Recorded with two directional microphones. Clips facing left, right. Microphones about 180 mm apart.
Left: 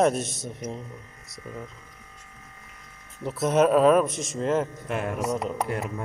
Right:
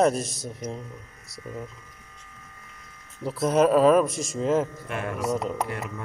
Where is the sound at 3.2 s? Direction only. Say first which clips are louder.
Even; centre (ahead or behind).